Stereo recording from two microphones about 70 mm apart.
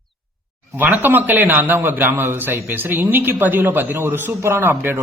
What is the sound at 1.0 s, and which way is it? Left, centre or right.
A woman's voice, right.